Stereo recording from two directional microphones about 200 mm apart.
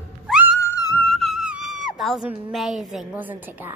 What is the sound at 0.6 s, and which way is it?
Music, 15° left (ahead or behind).